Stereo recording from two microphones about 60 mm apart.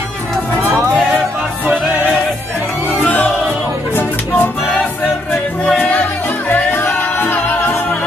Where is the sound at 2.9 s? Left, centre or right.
Left.